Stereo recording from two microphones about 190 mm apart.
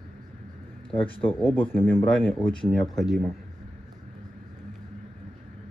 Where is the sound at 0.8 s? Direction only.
30° left (ahead or behind).